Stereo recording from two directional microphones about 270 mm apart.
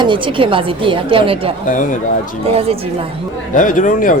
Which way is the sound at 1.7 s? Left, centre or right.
Left.